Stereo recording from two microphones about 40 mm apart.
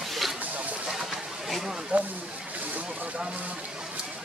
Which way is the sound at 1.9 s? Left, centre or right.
Right.